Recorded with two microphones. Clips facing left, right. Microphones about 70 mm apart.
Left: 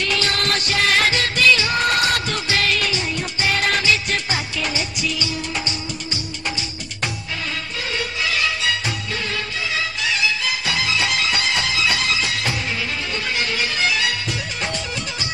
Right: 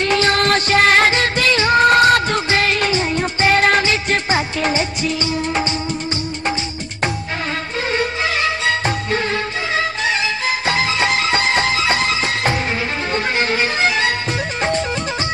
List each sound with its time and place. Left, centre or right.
0.0 s music: right
7.9 s music: right